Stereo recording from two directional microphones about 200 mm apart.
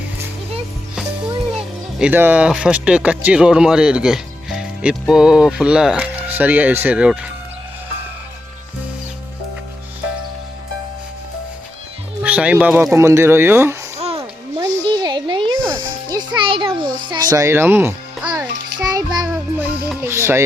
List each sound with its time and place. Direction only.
2.0 s speech: 10° right (ahead or behind)
12.2 s speech: 5° right (ahead or behind)
14.6 s a sound: 20° right (ahead or behind)
15.7 s music: 20° right (ahead or behind)